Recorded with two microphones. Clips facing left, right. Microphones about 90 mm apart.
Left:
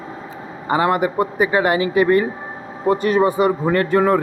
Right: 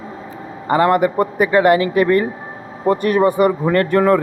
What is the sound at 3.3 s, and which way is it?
Speech, 55° right (ahead or behind).